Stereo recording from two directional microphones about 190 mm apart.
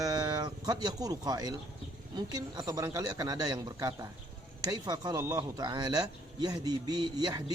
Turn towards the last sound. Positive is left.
turn(degrees=-20)  # may be behind; listen again after turning